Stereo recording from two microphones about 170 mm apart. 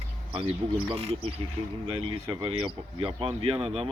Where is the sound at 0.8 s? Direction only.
35° right (ahead or behind).